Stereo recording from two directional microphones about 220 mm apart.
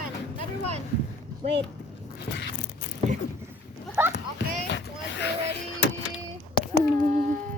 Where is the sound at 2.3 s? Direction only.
55° left (ahead or behind).